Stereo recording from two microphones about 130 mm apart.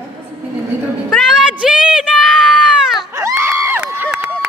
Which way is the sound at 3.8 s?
10° right (ahead or behind).